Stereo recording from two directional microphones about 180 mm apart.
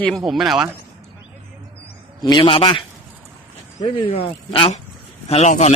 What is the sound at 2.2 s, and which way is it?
Speech, 25° left (ahead or behind).